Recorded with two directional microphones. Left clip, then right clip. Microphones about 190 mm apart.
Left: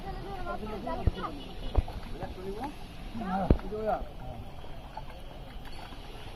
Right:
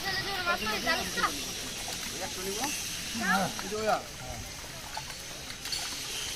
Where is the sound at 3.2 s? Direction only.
15° right (ahead or behind).